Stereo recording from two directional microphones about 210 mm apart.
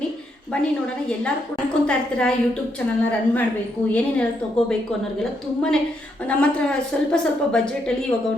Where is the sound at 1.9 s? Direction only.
5° left (ahead or behind).